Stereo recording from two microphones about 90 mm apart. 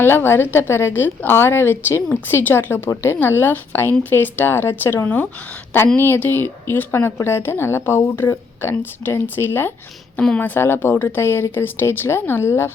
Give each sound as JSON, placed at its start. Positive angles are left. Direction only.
{"t": 0.0, "sound": "a woman's voice", "side_deg": 25}